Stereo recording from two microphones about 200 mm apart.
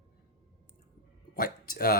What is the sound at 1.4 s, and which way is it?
Speech, 45° left (ahead or behind).